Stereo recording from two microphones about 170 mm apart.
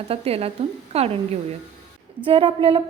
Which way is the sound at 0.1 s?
35° right (ahead or behind).